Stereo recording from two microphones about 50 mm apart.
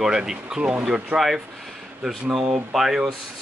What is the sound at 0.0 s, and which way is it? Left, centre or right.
Speech, centre.